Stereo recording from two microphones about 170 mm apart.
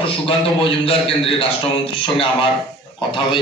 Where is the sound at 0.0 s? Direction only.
30° left (ahead or behind).